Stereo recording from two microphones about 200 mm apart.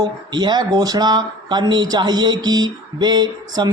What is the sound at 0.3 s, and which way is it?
Speech, 20° right (ahead or behind).